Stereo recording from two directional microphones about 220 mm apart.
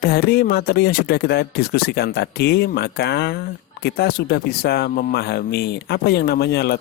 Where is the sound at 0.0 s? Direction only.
45° left (ahead or behind).